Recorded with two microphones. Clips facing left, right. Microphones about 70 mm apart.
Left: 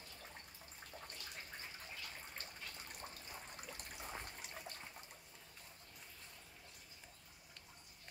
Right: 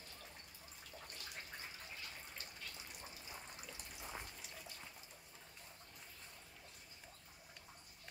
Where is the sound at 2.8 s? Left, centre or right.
Left.